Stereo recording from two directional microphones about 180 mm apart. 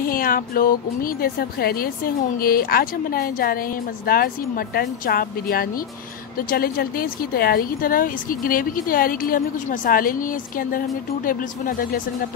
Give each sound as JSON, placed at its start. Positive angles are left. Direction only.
{"t": 0.0, "sound": "speech", "side_deg": 50}